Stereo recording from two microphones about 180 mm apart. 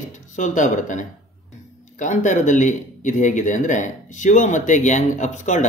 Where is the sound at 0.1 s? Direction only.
45° left (ahead or behind).